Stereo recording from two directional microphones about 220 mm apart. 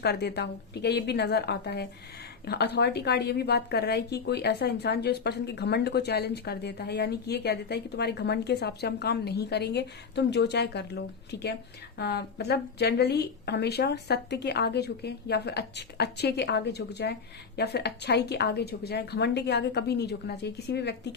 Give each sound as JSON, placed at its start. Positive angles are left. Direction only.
{"t": 0.0, "sound": "a woman's voice", "side_deg": 50}